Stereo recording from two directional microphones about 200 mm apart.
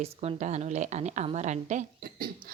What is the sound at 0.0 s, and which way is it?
A woman's voice, 30° right (ahead or behind).